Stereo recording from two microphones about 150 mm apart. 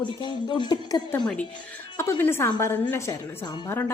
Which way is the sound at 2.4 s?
25° left (ahead or behind).